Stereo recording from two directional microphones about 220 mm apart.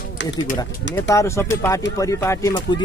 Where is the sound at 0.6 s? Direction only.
15° left (ahead or behind).